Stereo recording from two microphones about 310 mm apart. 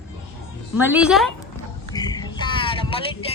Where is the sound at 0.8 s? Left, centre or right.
Centre.